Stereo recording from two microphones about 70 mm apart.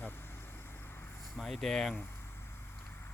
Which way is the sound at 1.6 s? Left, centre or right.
Centre.